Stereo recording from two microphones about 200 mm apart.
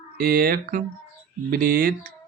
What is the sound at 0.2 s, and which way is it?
Speech, 50° right (ahead or behind).